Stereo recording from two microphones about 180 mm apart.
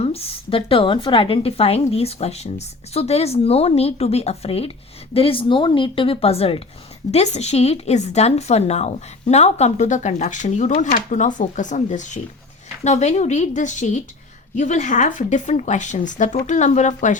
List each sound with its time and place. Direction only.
0.0 s a woman's voice: 35° left (ahead or behind)